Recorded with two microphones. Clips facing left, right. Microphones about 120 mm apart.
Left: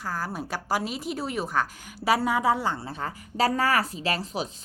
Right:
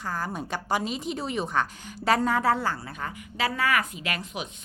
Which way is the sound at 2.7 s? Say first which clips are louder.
Left 2 dB; 30° left (ahead or behind).